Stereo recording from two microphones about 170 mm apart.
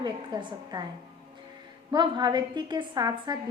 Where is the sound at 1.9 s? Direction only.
25° right (ahead or behind).